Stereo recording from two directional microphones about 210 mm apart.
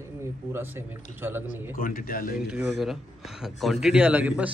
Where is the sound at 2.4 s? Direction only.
5° right (ahead or behind).